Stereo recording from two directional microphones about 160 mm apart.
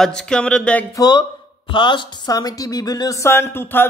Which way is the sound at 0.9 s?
25° left (ahead or behind).